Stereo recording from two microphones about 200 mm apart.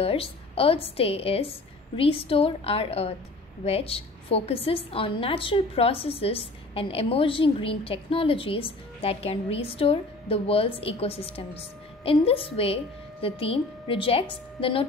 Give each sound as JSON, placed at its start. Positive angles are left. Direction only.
{"t": 0.0, "sound": "a woman's voice", "side_deg": 30}